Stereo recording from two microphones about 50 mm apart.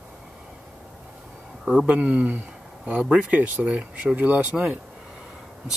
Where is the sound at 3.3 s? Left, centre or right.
Right.